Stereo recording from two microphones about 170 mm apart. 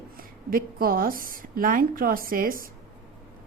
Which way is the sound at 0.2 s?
60° right (ahead or behind).